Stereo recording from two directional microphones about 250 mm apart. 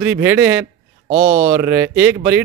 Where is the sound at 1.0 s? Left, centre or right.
Right.